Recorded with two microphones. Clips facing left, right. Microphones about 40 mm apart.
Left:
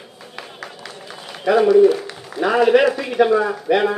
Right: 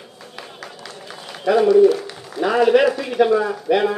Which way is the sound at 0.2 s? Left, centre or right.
Centre.